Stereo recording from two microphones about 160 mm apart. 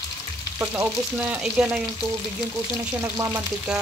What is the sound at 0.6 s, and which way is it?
Frying, 15° right (ahead or behind).